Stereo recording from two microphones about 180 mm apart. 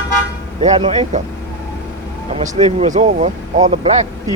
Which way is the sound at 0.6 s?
30° right (ahead or behind).